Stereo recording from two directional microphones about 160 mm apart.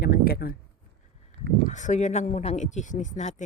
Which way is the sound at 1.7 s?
50° left (ahead or behind).